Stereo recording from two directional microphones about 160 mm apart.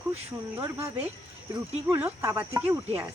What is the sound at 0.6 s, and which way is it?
Speech, 15° right (ahead or behind).